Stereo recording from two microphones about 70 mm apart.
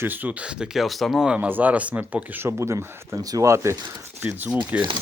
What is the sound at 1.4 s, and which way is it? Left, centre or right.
Speech, right.